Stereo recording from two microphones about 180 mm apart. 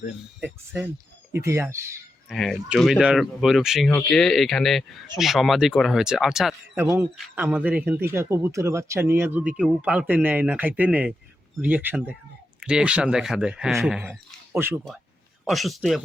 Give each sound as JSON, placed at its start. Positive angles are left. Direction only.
{"t": 0.3, "sound": "speech", "side_deg": -10}
{"t": 2.3, "sound": "speech", "side_deg": 0}
{"t": 6.8, "sound": "speech", "side_deg": -15}
{"t": 15.4, "sound": "speech", "side_deg": 0}